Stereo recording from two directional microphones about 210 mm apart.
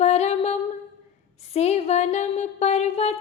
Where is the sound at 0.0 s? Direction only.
30° left (ahead or behind).